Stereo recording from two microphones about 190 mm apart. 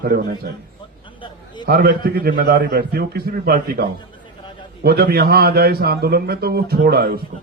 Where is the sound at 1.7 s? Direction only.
50° right (ahead or behind).